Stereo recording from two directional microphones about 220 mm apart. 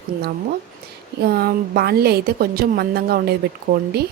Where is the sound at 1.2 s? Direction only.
45° right (ahead or behind).